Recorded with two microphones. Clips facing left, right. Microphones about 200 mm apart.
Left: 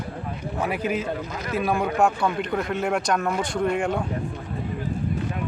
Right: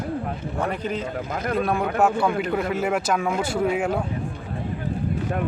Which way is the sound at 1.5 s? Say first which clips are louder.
Even; centre (ahead or behind).